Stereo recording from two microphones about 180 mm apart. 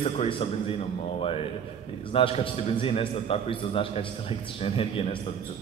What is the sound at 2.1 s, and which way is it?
A man's voice, 30° left (ahead or behind).